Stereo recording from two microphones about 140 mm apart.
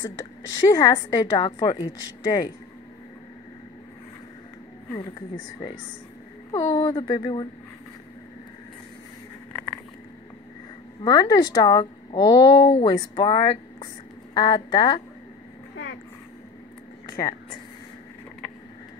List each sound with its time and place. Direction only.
0.0 s a woman's voice: 25° left (ahead or behind)
6.5 s a woman's voice: 25° left (ahead or behind)
9.5 s a sound: 10° left (ahead or behind)
11.1 s a woman's voice: 30° left (ahead or behind)
17.2 s speech: 30° left (ahead or behind)